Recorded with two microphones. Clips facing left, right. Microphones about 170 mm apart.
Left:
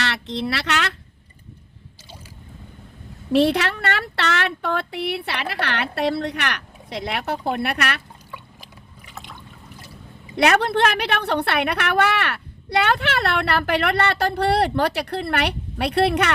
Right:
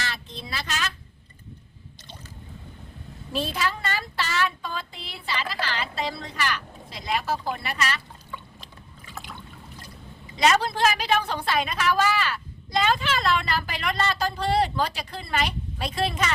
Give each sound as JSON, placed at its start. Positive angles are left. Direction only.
{"t": 0.0, "sound": "speech", "side_deg": 75}
{"t": 3.3, "sound": "a woman's voice", "side_deg": 70}
{"t": 8.3, "sound": "boat", "side_deg": 10}
{"t": 10.3, "sound": "a woman's voice", "side_deg": 65}